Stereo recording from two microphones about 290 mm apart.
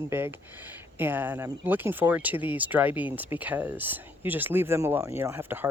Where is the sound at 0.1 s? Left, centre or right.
Centre.